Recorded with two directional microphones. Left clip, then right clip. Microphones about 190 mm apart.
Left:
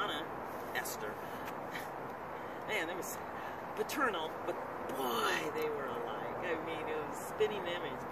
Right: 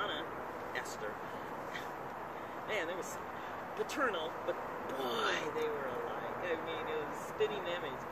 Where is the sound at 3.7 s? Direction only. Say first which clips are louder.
Left 1 dB; 55° left (ahead or behind).